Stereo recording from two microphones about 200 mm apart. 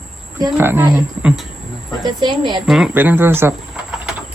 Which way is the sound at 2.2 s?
20° right (ahead or behind).